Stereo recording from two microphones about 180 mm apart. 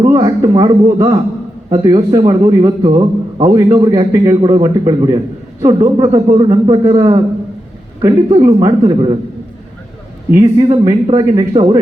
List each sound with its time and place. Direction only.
0.0 s a man's voice: 20° right (ahead or behind)
8.4 s a man's voice: 35° right (ahead or behind)
10.3 s a man's voice: 20° right (ahead or behind)